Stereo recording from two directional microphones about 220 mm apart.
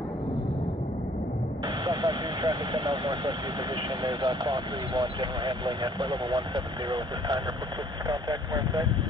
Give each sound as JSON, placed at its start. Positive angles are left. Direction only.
{"t": 1.9, "sound": "speech", "side_deg": -15}